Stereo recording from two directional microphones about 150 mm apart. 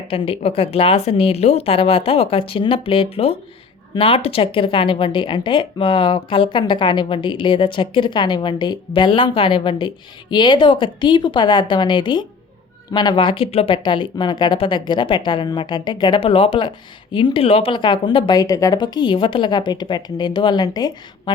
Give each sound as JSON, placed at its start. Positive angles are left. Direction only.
{"t": 0.1, "sound": "speech", "side_deg": 40}